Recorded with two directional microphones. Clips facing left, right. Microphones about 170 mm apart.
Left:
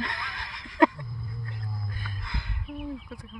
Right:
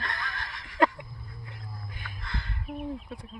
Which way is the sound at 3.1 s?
30° right (ahead or behind).